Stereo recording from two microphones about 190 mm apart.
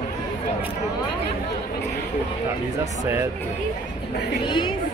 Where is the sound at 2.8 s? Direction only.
15° right (ahead or behind).